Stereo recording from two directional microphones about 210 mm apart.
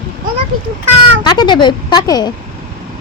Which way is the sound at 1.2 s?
20° left (ahead or behind).